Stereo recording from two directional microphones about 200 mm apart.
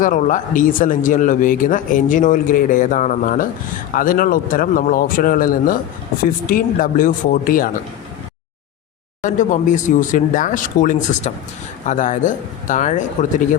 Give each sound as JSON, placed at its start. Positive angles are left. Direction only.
{"t": 0.0, "sound": "speech", "side_deg": 40}
{"t": 9.2, "sound": "speech", "side_deg": 40}